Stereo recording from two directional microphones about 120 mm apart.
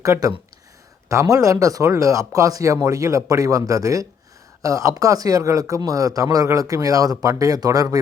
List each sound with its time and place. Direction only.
0.0 s speech: 25° right (ahead or behind)